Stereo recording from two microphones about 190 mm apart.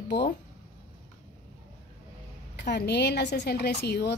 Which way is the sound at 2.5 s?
60° left (ahead or behind).